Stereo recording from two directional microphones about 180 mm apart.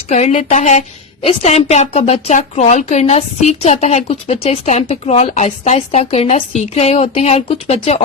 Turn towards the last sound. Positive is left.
turn(degrees=35)  # may be behind; listen again after turning